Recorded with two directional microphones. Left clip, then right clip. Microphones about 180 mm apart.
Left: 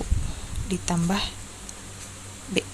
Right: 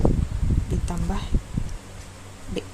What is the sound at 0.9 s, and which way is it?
Speech, 10° left (ahead or behind).